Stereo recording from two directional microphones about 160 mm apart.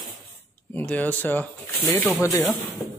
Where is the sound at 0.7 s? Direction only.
10° left (ahead or behind).